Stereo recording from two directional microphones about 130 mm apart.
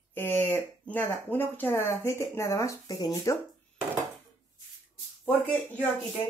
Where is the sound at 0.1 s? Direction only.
15° left (ahead or behind).